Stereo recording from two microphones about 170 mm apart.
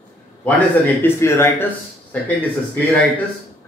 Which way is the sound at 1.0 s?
15° left (ahead or behind).